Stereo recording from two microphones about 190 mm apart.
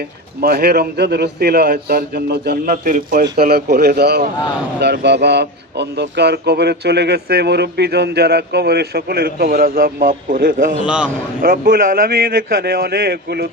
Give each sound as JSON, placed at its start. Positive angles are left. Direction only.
{"t": 0.4, "sound": "speech", "side_deg": -55}
{"t": 10.8, "sound": "a man's voice", "side_deg": -5}
{"t": 11.3, "sound": "a man's voice", "side_deg": -45}